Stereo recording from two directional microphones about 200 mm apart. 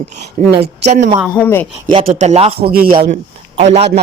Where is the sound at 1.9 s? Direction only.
30° right (ahead or behind).